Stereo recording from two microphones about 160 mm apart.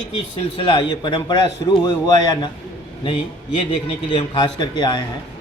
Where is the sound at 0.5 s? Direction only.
35° left (ahead or behind).